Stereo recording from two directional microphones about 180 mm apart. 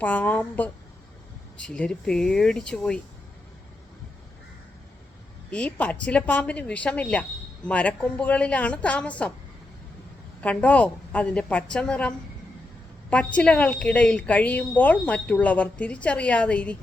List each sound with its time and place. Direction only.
0.0 s a woman's voice: 10° left (ahead or behind)
5.5 s a woman's voice: 5° left (ahead or behind)
10.4 s a woman's voice: 10° left (ahead or behind)